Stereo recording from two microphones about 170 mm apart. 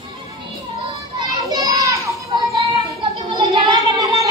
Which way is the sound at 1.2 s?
20° right (ahead or behind).